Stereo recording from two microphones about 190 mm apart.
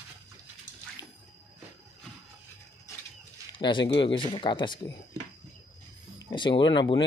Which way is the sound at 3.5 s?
25° left (ahead or behind).